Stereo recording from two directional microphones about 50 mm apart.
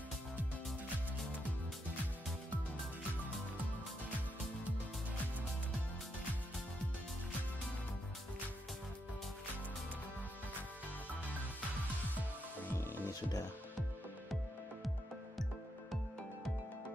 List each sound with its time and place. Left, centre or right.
12.7 s music: left